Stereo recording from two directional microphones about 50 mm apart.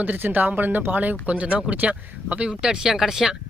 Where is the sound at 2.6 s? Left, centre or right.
Centre.